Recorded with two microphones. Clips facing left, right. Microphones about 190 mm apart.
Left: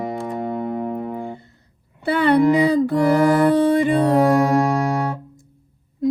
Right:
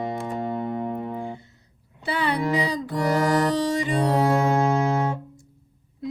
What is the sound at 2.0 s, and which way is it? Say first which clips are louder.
Music: left 10 dB; 55° left (ahead or behind).